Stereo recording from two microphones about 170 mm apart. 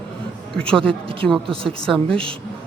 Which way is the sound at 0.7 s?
5° left (ahead or behind).